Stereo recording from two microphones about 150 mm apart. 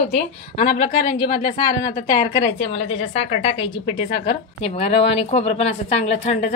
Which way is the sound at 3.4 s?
40° left (ahead or behind).